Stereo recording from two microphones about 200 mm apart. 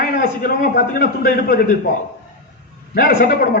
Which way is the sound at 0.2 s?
45° left (ahead or behind).